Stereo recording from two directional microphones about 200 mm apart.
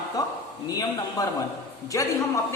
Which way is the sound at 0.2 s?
15° left (ahead or behind).